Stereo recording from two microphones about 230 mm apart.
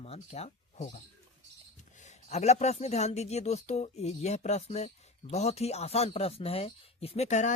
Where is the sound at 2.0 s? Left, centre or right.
Left.